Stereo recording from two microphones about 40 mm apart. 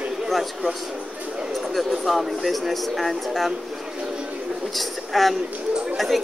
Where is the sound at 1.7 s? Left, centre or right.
Centre.